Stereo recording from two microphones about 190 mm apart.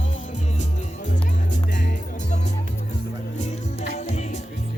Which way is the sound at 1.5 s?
40° left (ahead or behind).